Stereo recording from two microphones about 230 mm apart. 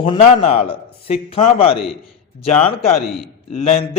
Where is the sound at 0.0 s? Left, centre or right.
Left.